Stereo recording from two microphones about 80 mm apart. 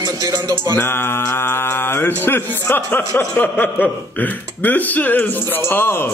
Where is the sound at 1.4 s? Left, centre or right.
Left.